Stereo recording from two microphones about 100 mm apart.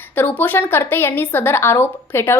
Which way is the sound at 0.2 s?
20° left (ahead or behind).